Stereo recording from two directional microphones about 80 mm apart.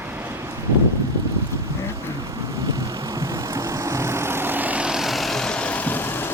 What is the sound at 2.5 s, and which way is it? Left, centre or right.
Vehicle, right.